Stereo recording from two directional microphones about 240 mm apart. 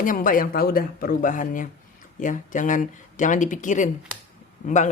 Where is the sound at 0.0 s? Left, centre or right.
Left.